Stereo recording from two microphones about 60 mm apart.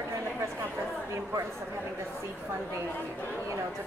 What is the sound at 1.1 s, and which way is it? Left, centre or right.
Speech, right.